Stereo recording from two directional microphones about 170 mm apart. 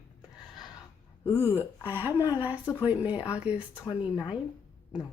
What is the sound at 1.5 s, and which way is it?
A woman's voice, 10° right (ahead or behind).